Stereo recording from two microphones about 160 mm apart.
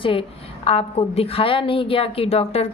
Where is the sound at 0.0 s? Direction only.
35° left (ahead or behind).